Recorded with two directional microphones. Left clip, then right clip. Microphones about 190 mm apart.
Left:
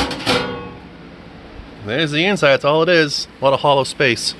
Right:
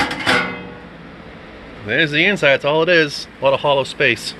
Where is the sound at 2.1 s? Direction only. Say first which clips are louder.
Left 2 dB; 20° left (ahead or behind).